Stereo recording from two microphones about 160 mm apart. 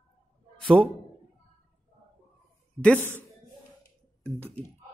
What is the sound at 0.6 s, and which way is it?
Speech, 30° right (ahead or behind).